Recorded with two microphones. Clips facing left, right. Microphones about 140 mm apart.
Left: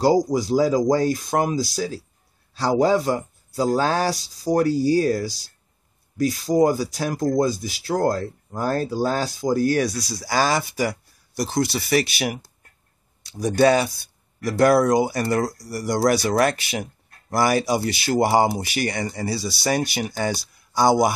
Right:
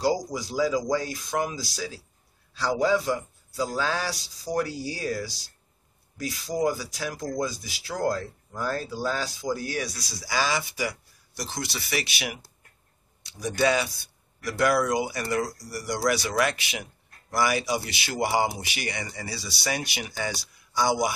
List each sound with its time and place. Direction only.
0.0 s speech: 45° left (ahead or behind)